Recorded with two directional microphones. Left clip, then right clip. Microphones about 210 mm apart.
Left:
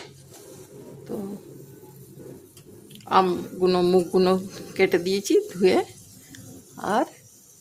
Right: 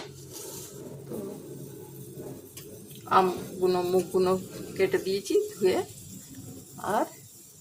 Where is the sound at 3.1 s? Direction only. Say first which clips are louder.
Left 3 dB; 35° left (ahead or behind).